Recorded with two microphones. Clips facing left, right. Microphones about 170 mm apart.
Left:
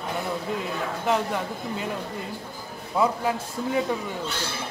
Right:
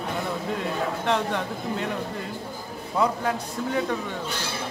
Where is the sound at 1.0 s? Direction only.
5° left (ahead or behind).